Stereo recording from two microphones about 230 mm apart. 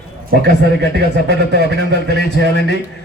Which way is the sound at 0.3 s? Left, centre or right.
Right.